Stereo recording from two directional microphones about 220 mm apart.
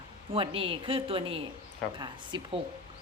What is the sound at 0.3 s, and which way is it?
A woman's voice, 25° right (ahead or behind).